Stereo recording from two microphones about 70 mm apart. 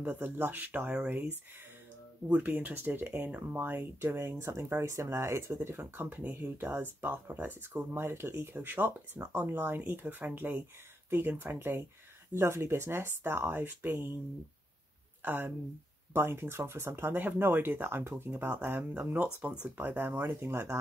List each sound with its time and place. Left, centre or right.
0.0 s speech: right
2.2 s speech: right
15.2 s speech: right